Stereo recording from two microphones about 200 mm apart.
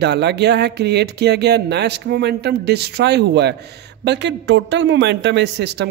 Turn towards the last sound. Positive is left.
turn(degrees=-60)  # may be behind; listen again after turning